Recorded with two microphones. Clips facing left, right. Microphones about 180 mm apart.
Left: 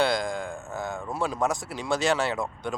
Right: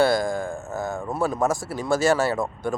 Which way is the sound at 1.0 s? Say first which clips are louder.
Right 5 dB; 25° right (ahead or behind).